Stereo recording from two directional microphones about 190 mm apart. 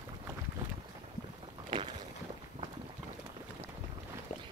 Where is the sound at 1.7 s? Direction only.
25° right (ahead or behind).